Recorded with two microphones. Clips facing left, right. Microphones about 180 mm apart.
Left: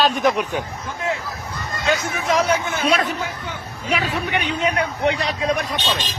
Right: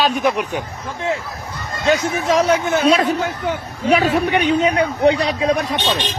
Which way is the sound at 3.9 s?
40° right (ahead or behind).